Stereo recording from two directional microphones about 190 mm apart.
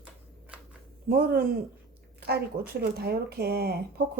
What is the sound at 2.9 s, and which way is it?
A woman's voice, 55° right (ahead or behind).